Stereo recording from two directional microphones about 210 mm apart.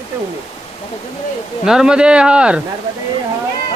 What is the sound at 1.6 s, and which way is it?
Speech, centre (ahead or behind).